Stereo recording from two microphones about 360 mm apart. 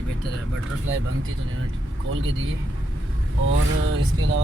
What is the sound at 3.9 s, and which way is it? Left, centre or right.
Speech, right.